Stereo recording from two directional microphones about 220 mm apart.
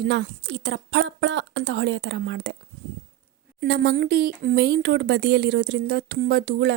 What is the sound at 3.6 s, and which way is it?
Speech, 50° right (ahead or behind).